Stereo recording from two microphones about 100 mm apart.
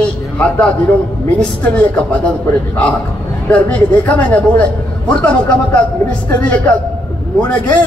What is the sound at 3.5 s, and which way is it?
A man's voice, 15° left (ahead or behind).